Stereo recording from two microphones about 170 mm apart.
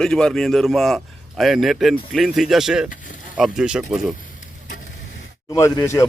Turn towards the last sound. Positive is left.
turn(degrees=20)  # may be behind; listen again after turning